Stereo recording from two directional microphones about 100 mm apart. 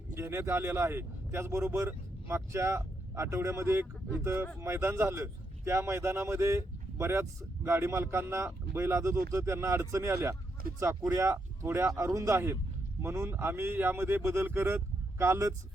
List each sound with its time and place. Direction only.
0.1 s speech: 25° right (ahead or behind)